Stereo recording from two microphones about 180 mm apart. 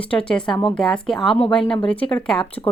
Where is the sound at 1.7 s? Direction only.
30° left (ahead or behind).